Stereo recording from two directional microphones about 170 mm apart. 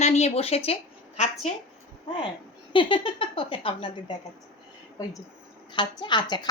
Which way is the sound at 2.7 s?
30° left (ahead or behind).